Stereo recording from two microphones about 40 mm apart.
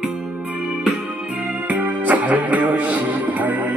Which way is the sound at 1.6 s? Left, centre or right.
Right.